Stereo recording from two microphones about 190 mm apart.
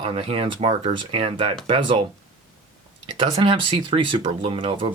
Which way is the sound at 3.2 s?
25° right (ahead or behind).